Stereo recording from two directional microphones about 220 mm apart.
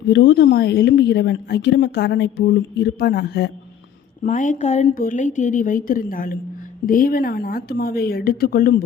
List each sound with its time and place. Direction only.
0.1 s a woman's voice: 50° left (ahead or behind)
4.2 s a woman's voice: 35° left (ahead or behind)